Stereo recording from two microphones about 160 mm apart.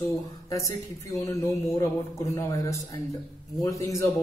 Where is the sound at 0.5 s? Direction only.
20° left (ahead or behind).